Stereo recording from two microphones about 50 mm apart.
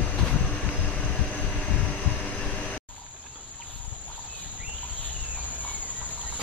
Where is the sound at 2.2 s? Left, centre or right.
Left.